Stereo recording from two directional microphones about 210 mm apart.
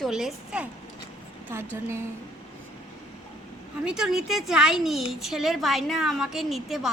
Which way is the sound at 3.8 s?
5° right (ahead or behind).